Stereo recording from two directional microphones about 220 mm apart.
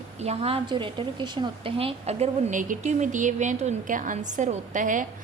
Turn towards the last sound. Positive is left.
turn(degrees=-35)  # may be behind; listen again after turning